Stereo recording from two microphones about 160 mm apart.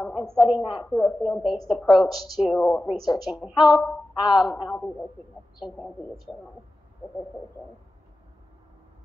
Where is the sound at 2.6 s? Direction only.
20° left (ahead or behind).